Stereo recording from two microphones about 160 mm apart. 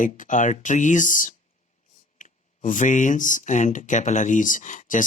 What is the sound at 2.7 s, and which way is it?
Speech, 50° left (ahead or behind).